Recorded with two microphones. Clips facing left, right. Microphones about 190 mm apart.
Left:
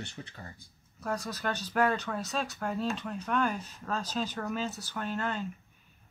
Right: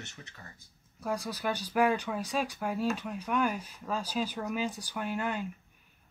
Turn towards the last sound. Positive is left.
turn(degrees=-10)  # may be behind; listen again after turning